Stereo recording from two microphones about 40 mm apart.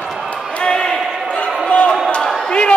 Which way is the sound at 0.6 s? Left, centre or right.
Left.